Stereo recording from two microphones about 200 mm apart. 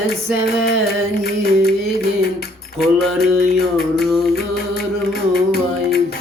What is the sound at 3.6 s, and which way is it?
Music, 50° left (ahead or behind).